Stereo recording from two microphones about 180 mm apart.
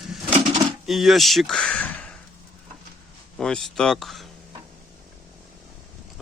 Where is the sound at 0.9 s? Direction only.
Centre (ahead or behind).